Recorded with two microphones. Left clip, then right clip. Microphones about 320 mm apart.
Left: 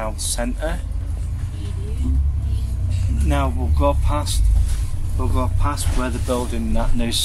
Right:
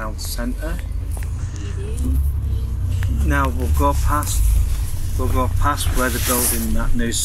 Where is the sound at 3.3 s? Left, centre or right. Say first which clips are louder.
Right 3 dB; centre.